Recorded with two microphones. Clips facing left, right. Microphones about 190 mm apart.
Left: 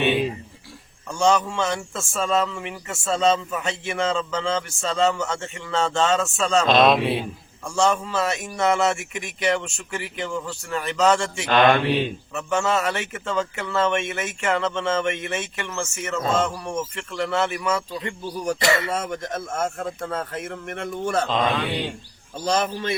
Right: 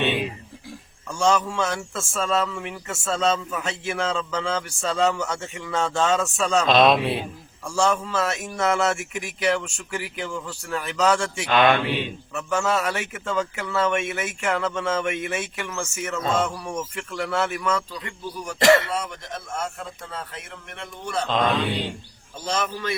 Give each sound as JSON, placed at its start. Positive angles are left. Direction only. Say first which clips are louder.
{"t": 1.2, "sound": "a man's voice", "louder": "left 1 dB", "side_deg": 0}
{"t": 11.5, "sound": "speech", "louder": "left 2 dB", "side_deg": 40}
{"t": 12.3, "sound": "a man's voice", "louder": "even", "side_deg": 0}
{"t": 18.4, "sound": "a man's voice", "louder": "right 4 dB", "side_deg": 45}
{"t": 22.4, "sound": "speech", "louder": "left 4 dB", "side_deg": 35}